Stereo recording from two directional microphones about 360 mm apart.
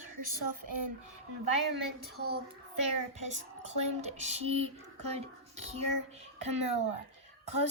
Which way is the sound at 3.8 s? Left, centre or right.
Centre.